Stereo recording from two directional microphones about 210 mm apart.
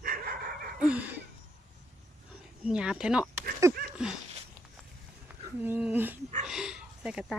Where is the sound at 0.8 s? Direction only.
5° right (ahead or behind).